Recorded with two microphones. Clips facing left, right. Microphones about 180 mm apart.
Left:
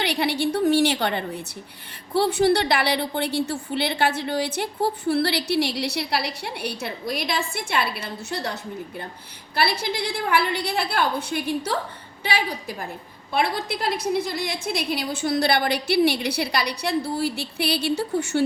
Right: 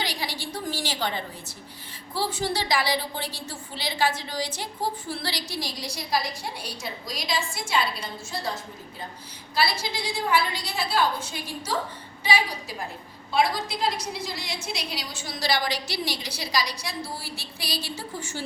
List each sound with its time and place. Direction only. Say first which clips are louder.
0.0 s a woman's voice: left 9 dB; 65° left (ahead or behind)
9.6 s a woman's voice: left 3 dB; 60° left (ahead or behind)